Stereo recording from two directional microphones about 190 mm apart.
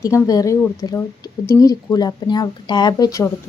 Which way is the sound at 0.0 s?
15° left (ahead or behind).